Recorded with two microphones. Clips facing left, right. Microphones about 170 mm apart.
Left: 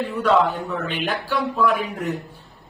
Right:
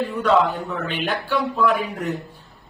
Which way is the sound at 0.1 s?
5° left (ahead or behind).